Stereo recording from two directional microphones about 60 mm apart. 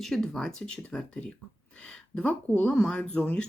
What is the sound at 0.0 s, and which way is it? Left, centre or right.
Speech, centre.